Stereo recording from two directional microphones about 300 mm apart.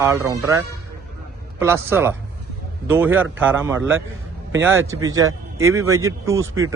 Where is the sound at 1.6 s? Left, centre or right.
Centre.